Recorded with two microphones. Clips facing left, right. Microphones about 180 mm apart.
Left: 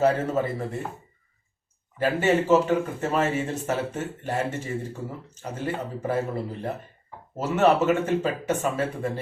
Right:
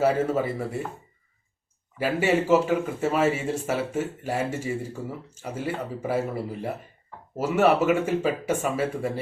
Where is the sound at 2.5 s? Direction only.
10° right (ahead or behind).